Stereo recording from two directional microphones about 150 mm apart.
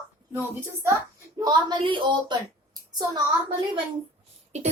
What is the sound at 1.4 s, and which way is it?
A woman's voice, 30° right (ahead or behind).